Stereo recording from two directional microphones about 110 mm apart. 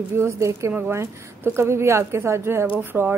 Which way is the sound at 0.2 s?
25° right (ahead or behind).